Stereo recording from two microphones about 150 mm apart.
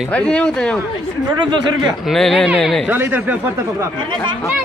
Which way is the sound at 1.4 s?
30° right (ahead or behind).